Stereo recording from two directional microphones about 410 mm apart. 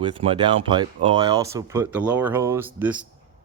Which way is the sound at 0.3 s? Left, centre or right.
Centre.